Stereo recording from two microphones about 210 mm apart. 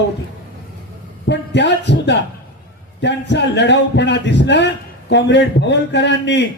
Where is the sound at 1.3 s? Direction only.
55° left (ahead or behind).